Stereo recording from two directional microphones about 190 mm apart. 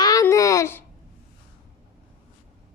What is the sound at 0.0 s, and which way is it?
Babbling, 20° left (ahead or behind).